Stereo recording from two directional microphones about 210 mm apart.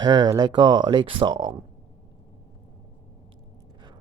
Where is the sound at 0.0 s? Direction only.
20° right (ahead or behind).